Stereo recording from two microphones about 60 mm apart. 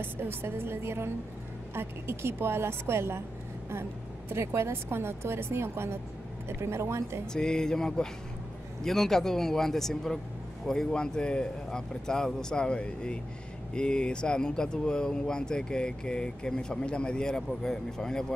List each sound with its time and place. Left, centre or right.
0.0 s a woman's voice: right
4.3 s speech: right
7.3 s speech: centre